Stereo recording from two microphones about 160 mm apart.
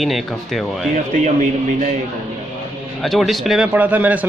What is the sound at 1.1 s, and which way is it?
Speech, 50° right (ahead or behind).